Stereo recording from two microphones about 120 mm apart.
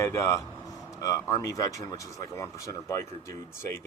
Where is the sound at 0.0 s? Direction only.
20° left (ahead or behind).